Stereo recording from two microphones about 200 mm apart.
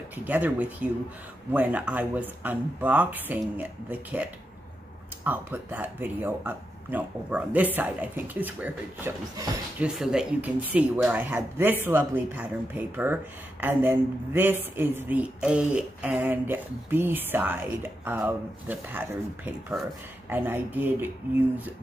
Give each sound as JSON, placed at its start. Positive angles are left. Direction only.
{"t": 0.1, "sound": "speech", "side_deg": -10}